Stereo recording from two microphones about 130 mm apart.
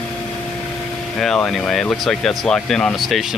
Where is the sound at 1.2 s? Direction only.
5° left (ahead or behind).